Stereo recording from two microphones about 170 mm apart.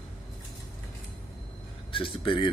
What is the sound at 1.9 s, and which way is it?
Speech, 30° left (ahead or behind).